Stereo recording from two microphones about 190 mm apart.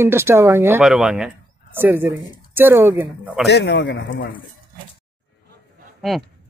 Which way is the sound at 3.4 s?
65° left (ahead or behind).